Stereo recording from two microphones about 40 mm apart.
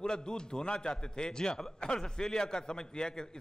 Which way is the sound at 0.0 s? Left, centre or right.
Left.